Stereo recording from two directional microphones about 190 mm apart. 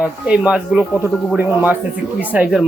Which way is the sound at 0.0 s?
5° right (ahead or behind).